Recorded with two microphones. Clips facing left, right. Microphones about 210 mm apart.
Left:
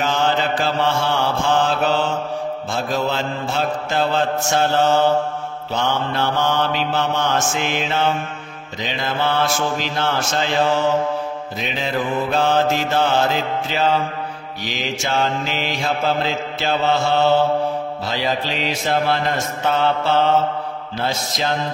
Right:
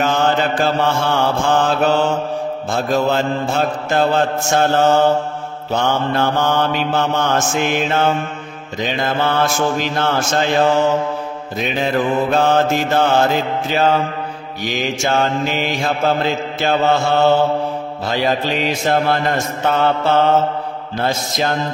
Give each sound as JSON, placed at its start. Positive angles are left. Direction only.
{"t": 0.0, "sound": "mantra", "side_deg": -50}
{"t": 11.8, "sound": "mantra", "side_deg": -50}